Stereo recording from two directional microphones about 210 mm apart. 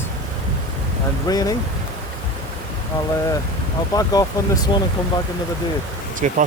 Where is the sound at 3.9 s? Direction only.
20° left (ahead or behind).